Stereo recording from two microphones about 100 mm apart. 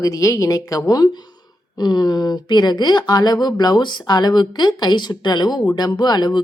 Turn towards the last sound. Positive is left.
turn(degrees=45)  # may be behind; listen again after turning